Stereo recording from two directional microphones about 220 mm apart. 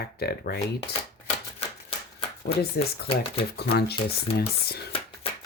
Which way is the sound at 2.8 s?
45° left (ahead or behind).